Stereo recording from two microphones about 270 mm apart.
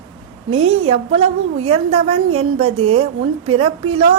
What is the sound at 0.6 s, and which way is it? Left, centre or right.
Speech, right.